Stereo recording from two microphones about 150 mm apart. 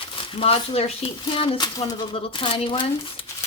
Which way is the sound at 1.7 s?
25° left (ahead or behind).